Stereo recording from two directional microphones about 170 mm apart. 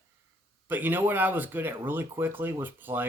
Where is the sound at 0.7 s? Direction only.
10° right (ahead or behind).